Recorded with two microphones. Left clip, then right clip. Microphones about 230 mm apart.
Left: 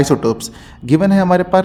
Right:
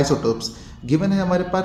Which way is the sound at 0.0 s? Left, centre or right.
Left.